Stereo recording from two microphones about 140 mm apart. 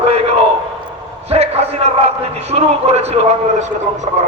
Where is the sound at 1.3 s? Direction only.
50° right (ahead or behind).